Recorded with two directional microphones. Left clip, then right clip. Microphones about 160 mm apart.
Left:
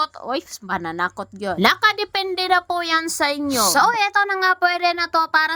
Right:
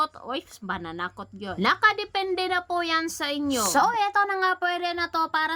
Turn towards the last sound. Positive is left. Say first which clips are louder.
# left 7 dB
turn(degrees=35)  # may be behind; listen again after turning